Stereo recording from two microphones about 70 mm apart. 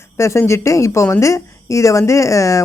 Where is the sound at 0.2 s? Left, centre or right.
Left.